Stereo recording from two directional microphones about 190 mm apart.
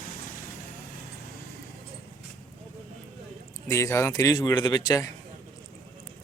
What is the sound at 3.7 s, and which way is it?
Speech, 15° left (ahead or behind).